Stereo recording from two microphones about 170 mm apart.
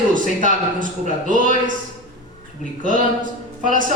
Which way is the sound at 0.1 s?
50° right (ahead or behind).